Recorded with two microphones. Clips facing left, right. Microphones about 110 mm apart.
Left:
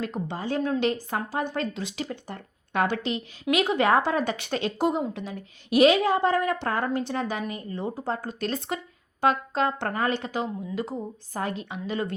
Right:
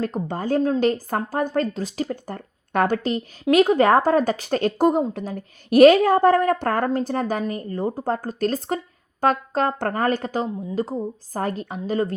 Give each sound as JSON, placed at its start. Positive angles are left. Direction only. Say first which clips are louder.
{"t": 0.0, "sound": "speech", "louder": "right 5 dB", "side_deg": -45}